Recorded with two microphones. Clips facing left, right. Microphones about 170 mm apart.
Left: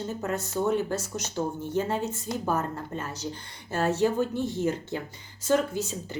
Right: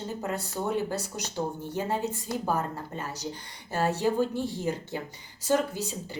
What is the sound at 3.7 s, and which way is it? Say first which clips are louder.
Speech: left 1 dB; 15° right (ahead or behind).